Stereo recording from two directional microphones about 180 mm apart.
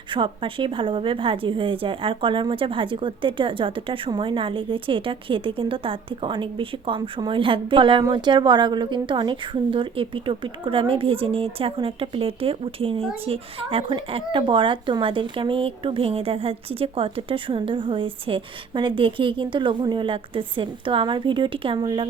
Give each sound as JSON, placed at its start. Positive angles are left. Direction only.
{"t": 0.1, "sound": "a woman's voice", "side_deg": -30}